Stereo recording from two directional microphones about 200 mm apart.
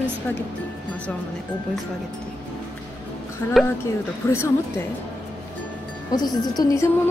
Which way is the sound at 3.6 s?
10° left (ahead or behind).